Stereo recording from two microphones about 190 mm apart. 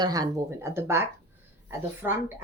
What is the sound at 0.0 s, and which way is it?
A woman's voice, 20° right (ahead or behind).